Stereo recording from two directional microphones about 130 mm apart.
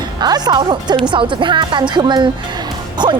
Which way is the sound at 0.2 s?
30° right (ahead or behind).